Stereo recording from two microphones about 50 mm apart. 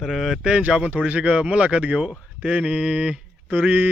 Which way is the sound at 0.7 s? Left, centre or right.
Right.